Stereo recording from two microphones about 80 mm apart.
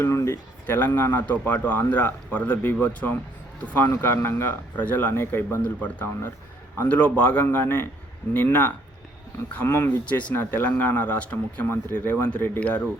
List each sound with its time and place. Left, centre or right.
0.0 s speech: left; by 12.9 s centre